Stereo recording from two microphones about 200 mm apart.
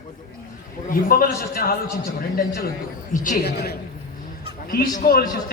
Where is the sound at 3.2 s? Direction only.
45° left (ahead or behind).